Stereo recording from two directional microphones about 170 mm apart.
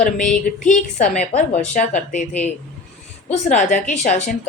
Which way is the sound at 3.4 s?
45° left (ahead or behind).